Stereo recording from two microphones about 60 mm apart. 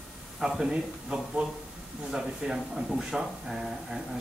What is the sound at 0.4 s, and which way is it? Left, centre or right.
A man's voice, centre.